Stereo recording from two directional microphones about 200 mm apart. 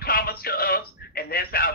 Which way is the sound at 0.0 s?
50° left (ahead or behind).